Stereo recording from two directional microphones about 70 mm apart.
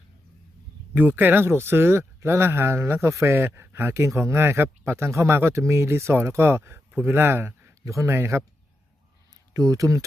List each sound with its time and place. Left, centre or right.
0.9 s speech: right
1.5 s speech: right
9.5 s speech: right